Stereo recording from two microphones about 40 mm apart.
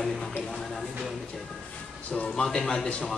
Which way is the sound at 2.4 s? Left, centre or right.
Centre.